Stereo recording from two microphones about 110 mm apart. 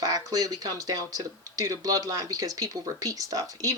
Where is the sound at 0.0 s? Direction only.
35° right (ahead or behind).